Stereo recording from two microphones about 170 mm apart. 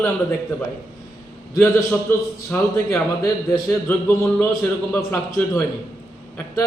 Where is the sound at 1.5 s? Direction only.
15° left (ahead or behind).